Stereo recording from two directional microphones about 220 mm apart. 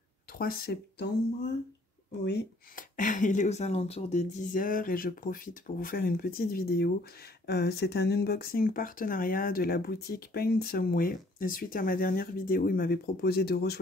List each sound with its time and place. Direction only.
0.4 s speech: 45° left (ahead or behind)